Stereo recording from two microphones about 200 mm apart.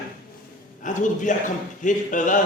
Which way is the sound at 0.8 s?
40° left (ahead or behind).